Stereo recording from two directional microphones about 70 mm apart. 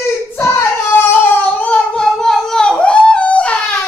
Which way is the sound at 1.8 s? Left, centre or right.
Centre.